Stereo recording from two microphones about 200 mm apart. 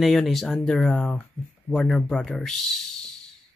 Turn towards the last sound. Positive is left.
turn(degrees=0)  # may be behind; listen again after turning